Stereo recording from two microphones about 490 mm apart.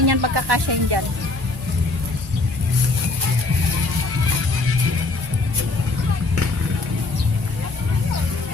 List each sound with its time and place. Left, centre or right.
0.0 s speech: right